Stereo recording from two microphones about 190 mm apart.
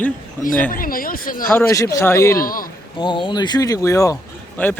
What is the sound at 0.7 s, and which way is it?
Speech, 50° left (ahead or behind).